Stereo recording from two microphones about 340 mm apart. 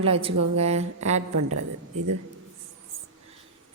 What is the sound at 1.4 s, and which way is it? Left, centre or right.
Speech, right.